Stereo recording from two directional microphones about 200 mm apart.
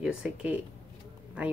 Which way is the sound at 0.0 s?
5° right (ahead or behind).